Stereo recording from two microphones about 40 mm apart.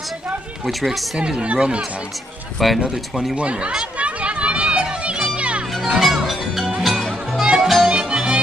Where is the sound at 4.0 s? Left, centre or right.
Right.